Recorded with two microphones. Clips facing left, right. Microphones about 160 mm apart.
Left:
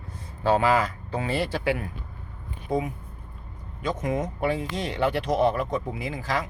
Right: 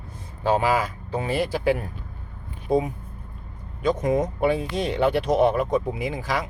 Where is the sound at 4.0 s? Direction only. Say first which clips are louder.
Right 3 dB; 35° right (ahead or behind).